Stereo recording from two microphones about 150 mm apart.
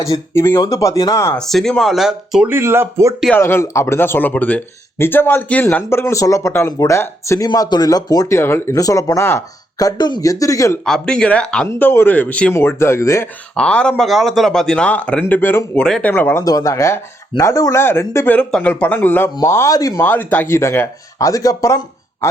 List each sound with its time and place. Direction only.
0.0 s speech: 20° left (ahead or behind)
1.4 s speech: centre (ahead or behind)
2.5 s speech: 15° right (ahead or behind)
3.3 s speech: 15° left (ahead or behind)
10.8 s speech: 5° left (ahead or behind)
13.6 s speech: 5° left (ahead or behind); by 20.0 s 25° left (ahead or behind)
20.0 s speech: 10° left (ahead or behind)